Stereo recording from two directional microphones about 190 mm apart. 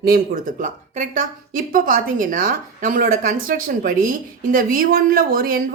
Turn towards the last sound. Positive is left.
turn(degrees=-50)  # may be behind; listen again after turning